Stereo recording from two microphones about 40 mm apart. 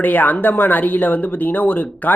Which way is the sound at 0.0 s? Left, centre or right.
Left.